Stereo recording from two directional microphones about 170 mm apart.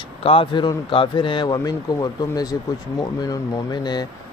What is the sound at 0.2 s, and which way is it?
Speech, 35° left (ahead or behind).